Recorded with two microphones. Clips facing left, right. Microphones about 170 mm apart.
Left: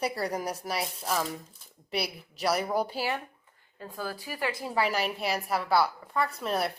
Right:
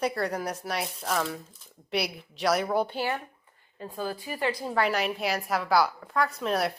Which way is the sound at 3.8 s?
15° right (ahead or behind).